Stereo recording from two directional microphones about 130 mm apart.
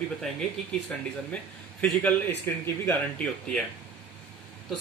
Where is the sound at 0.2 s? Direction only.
5° left (ahead or behind).